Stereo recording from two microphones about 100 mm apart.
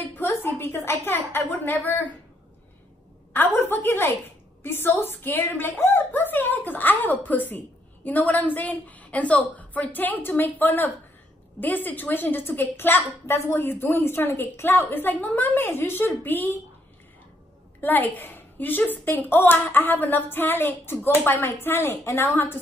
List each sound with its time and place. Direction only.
0.1 s a woman's voice: 20° left (ahead or behind)
3.3 s a woman's voice: 20° left (ahead or behind)
17.7 s a woman's voice: 20° left (ahead or behind)